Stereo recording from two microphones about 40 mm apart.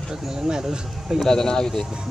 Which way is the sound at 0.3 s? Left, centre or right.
Centre.